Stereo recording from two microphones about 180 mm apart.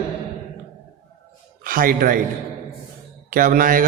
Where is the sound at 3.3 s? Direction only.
50° right (ahead or behind).